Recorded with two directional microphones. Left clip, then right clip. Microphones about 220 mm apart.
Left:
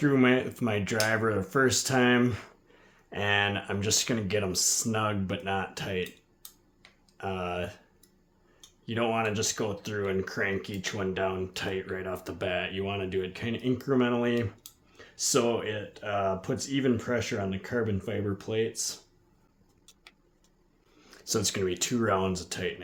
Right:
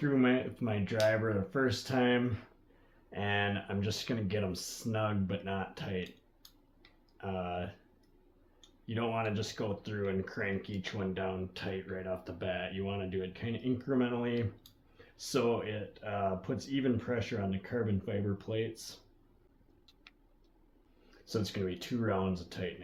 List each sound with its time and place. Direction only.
0.0 s speech: 35° left (ahead or behind)
7.2 s speech: 30° left (ahead or behind)
8.9 s speech: 30° left (ahead or behind)
21.1 s speech: 35° left (ahead or behind)